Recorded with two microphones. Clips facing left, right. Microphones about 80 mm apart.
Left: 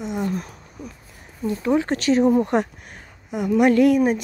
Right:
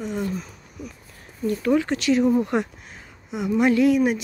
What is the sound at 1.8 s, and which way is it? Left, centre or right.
Speech, left.